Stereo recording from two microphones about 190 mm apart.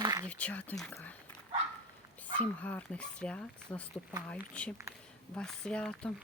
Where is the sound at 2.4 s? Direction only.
5° left (ahead or behind).